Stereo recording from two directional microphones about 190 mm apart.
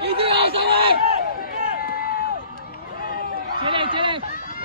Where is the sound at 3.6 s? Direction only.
25° right (ahead or behind).